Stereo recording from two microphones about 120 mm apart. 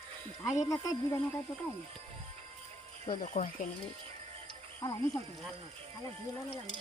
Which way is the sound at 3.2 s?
90° left.